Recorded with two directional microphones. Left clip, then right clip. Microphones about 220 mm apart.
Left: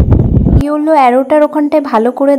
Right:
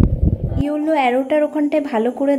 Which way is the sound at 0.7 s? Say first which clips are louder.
Left 8 dB; 15° left (ahead or behind).